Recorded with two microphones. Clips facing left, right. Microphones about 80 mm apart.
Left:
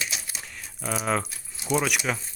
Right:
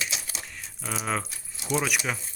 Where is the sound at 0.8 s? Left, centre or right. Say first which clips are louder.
Left 4 dB; centre.